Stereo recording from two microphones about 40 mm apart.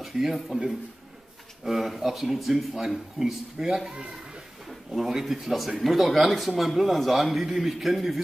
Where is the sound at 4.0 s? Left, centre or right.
Centre.